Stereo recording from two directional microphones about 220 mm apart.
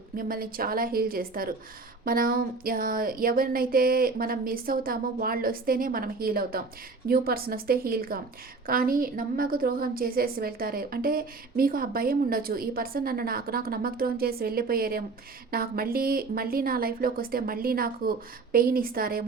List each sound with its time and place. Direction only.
0.2 s a woman's voice: 40° right (ahead or behind)